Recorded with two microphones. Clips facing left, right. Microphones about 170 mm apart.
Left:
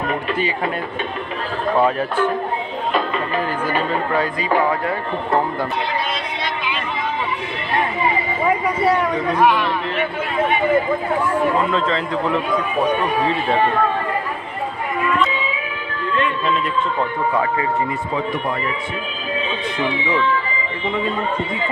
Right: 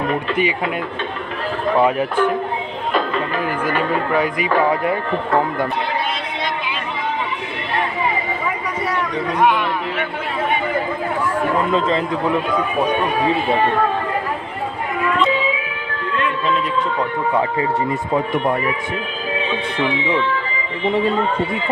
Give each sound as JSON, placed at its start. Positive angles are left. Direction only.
{"t": 1.7, "sound": "a man's voice", "side_deg": -15}
{"t": 4.1, "sound": "a man's voice", "side_deg": -15}
{"t": 9.4, "sound": "a man's voice", "side_deg": -20}
{"t": 11.7, "sound": "a man's voice", "side_deg": -15}
{"t": 17.4, "sound": "speech", "side_deg": -30}